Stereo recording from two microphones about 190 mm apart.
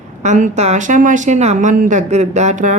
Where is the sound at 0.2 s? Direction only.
40° right (ahead or behind).